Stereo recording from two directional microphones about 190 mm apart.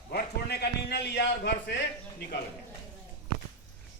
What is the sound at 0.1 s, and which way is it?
A man's voice, 55° left (ahead or behind).